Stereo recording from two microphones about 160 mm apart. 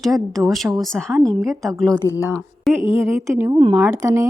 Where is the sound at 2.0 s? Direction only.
15° left (ahead or behind).